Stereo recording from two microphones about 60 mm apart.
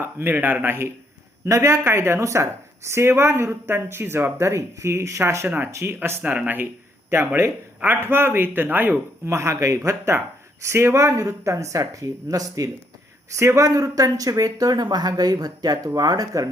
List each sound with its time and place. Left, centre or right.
0.0 s speech: right
1.5 s speech: right
1.8 s a woman's voice: right
5.5 s speech: right
6.3 s speech: right
7.1 s speech: right
9.2 s speech: right
13.3 s a woman's voice: right
13.7 s speech: right